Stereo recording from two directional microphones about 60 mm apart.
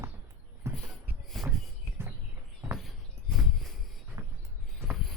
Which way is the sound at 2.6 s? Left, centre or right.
Right.